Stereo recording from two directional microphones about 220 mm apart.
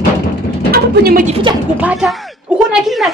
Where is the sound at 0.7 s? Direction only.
40° right (ahead or behind).